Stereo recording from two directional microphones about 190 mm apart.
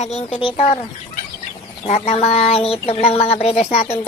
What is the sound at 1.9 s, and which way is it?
Speech, 35° left (ahead or behind).